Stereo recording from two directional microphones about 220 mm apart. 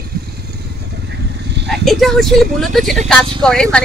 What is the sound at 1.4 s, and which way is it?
Vehicle, 50° right (ahead or behind).